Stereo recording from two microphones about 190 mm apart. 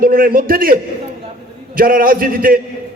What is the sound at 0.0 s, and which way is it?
A man's voice, 50° right (ahead or behind).